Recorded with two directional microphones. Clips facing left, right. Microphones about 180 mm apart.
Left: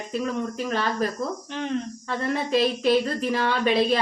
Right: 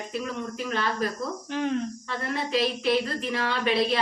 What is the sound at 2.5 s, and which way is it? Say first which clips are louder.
A woman's voice: left 4 dB; 45° left (ahead or behind).